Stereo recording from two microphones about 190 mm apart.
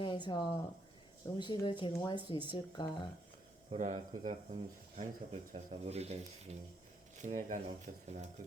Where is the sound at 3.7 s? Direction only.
40° right (ahead or behind).